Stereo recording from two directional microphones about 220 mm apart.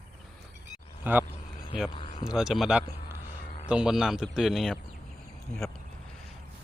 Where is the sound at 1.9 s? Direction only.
20° left (ahead or behind).